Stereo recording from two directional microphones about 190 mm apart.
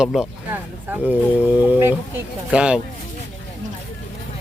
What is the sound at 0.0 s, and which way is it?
Speech, centre (ahead or behind).